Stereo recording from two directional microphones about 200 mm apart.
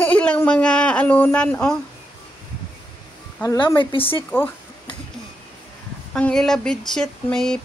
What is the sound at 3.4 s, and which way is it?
Speech, 25° left (ahead or behind).